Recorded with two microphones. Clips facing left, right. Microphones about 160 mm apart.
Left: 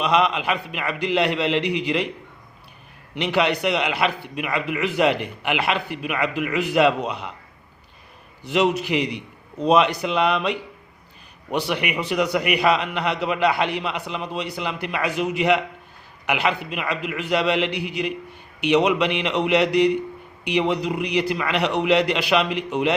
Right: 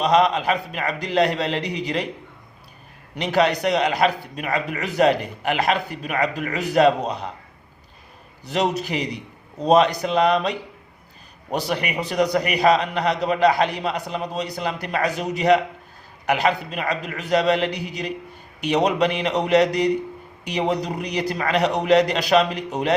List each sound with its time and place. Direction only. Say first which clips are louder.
0.0 s a man's voice: right 2 dB; 40° right (ahead or behind)
3.2 s a man's voice: right 1 dB; 40° right (ahead or behind)
8.4 s a man's voice: left 2 dB; 40° right (ahead or behind)